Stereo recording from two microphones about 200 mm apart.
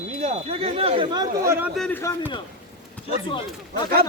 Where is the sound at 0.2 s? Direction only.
35° right (ahead or behind); by 1.7 s 10° right (ahead or behind).